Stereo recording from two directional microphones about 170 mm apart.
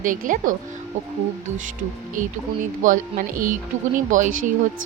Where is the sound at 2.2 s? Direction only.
50° right (ahead or behind).